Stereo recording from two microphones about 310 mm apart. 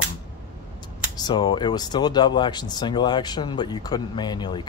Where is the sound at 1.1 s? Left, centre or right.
Centre.